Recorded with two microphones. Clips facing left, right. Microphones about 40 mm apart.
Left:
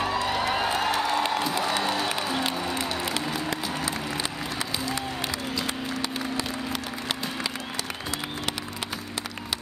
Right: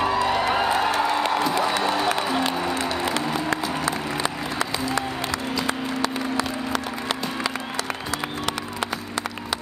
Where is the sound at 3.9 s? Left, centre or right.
Centre.